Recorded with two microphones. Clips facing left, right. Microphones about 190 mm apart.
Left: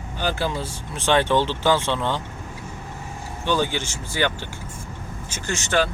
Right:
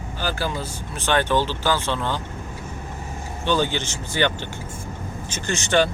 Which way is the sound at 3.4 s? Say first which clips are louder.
Right 1 dB; 10° left (ahead or behind).